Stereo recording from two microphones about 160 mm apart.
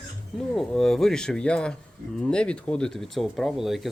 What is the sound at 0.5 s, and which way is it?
Speech, centre (ahead or behind).